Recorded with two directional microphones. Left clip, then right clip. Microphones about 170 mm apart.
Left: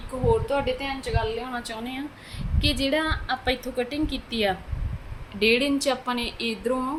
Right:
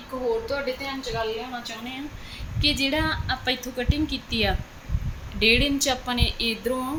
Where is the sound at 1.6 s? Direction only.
30° left (ahead or behind).